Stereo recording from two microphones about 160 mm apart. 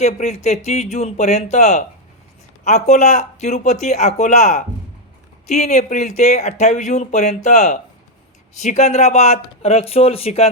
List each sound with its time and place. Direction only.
0.0 s speech: 45° left (ahead or behind)